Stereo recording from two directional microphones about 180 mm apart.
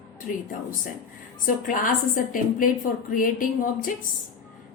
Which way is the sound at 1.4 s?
45° left (ahead or behind).